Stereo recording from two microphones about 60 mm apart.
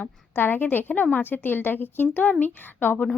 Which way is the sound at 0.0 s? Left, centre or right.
Left.